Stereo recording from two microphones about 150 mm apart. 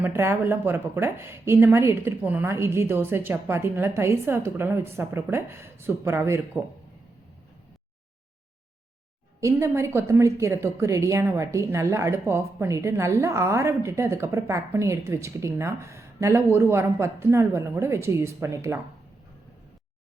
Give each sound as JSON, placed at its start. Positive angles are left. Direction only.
{"t": 0.0, "sound": "speech", "side_deg": -15}
{"t": 9.4, "sound": "a woman's voice", "side_deg": -20}